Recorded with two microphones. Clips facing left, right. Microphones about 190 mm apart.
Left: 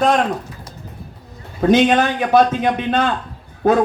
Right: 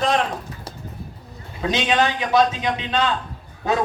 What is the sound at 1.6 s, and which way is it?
A man's voice, 55° left (ahead or behind).